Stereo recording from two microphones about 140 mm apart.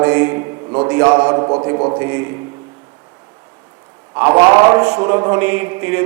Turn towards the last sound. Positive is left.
turn(degrees=-15)  # may be behind; listen again after turning